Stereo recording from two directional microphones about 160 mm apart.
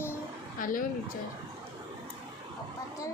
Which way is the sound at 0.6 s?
60° left (ahead or behind).